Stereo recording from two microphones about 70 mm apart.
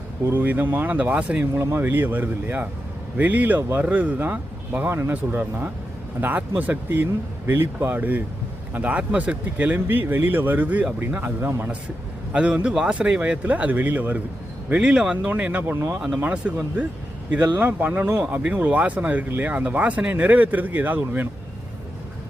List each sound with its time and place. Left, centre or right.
0.3 s speech: right
1.5 s speech: right
5.4 s speech: right
12.3 s speech: centre
14.7 s speech: centre
15.6 s speech: right
15.9 s speech: centre
17.6 s speech: right